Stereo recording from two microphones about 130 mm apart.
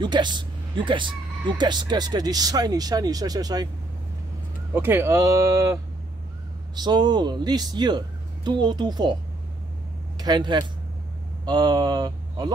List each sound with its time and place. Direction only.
0.0 s speech: 35° right (ahead or behind)
4.7 s speech: 20° right (ahead or behind); by 9.1 s 35° right (ahead or behind)
10.1 s speech: 35° right (ahead or behind)